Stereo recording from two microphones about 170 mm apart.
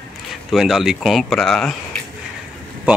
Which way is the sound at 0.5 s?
Centre (ahead or behind).